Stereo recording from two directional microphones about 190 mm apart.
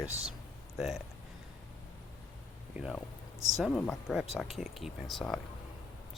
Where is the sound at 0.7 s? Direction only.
Centre (ahead or behind).